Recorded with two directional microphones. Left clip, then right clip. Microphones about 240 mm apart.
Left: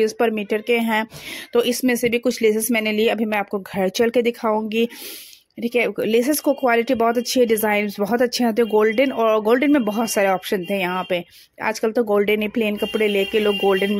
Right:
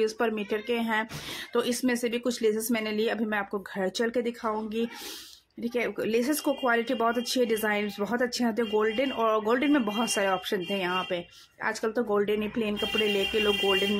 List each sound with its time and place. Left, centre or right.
0.0 s speech: left